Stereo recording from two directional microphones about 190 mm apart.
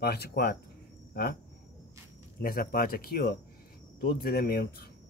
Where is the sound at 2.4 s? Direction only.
50° left (ahead or behind).